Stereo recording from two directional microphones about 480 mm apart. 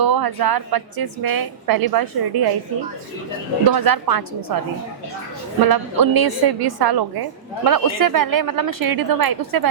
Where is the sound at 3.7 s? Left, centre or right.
Right.